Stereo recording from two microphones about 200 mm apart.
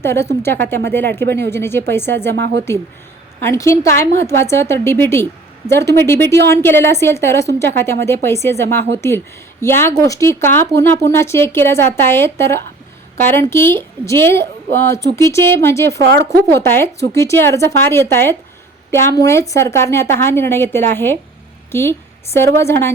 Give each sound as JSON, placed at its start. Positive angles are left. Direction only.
{"t": 0.0, "sound": "a woman's voice", "side_deg": 10}
{"t": 1.2, "sound": "a woman's voice", "side_deg": -55}
{"t": 1.5, "sound": "a woman's voice", "side_deg": 10}
{"t": 2.3, "sound": "a woman's voice", "side_deg": -60}
{"t": 3.4, "sound": "a woman's voice", "side_deg": 15}
{"t": 7.4, "sound": "a woman's voice", "side_deg": -60}
{"t": 8.0, "sound": "a woman's voice", "side_deg": 10}
{"t": 16.0, "sound": "a woman's voice", "side_deg": -55}
{"t": 16.6, "sound": "a woman's voice", "side_deg": 10}